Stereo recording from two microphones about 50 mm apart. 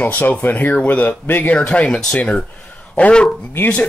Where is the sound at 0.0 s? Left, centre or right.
Left.